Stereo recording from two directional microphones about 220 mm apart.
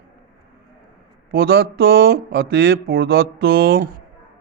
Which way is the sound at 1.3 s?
45° right (ahead or behind).